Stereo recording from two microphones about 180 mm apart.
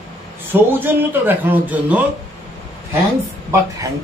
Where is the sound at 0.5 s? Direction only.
10° right (ahead or behind).